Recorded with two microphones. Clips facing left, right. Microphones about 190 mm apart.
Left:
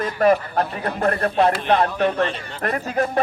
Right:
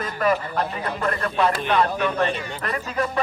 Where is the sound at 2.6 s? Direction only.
50° left (ahead or behind).